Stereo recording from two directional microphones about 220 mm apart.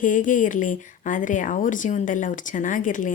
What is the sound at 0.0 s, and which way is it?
A woman's voice, 35° left (ahead or behind).